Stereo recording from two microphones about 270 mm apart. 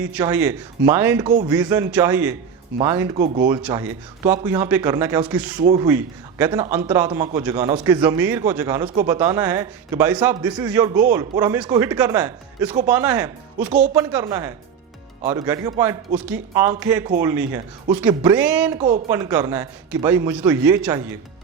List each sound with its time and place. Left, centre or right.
0.0 s a man's voice: centre
18.8 s a man's voice: right